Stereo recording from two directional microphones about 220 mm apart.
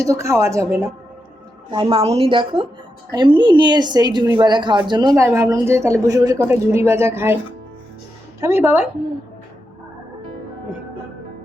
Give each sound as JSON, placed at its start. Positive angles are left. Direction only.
{"t": 0.0, "sound": "a woman's voice", "side_deg": -15}
{"t": 8.4, "sound": "a woman's voice", "side_deg": -10}